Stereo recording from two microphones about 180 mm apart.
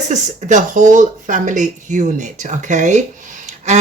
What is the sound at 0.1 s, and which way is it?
Speech, 45° right (ahead or behind).